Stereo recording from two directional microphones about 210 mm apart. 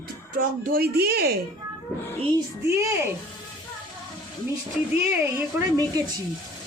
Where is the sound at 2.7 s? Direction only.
15° right (ahead or behind).